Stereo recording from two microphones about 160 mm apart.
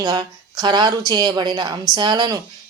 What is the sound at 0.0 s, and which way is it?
Speech, 25° right (ahead or behind).